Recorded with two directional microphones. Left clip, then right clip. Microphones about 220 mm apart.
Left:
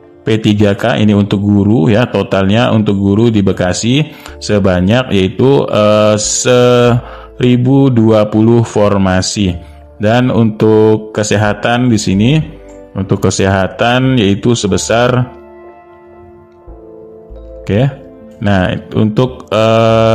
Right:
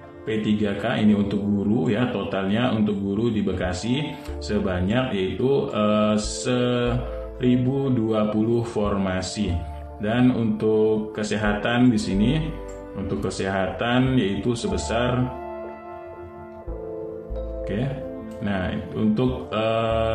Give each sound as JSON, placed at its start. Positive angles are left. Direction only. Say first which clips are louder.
{"t": 0.2, "sound": "speech", "louder": "left 13 dB", "side_deg": 50}
{"t": 18.4, "sound": "speech", "louder": "left 15 dB", "side_deg": 45}